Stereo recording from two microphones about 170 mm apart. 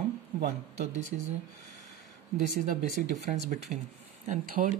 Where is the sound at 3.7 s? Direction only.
45° right (ahead or behind).